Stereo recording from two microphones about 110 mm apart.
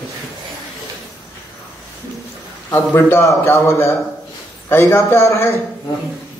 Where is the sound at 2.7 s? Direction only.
20° left (ahead or behind).